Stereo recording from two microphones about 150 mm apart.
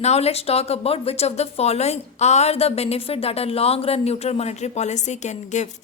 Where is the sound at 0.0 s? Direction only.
45° left (ahead or behind).